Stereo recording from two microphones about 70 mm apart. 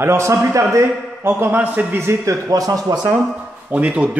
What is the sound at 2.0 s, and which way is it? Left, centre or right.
Speech, right.